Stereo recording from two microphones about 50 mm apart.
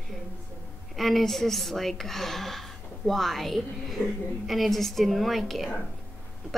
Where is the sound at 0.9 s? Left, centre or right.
Centre.